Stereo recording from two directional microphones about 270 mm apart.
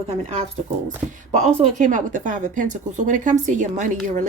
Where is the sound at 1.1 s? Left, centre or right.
Right.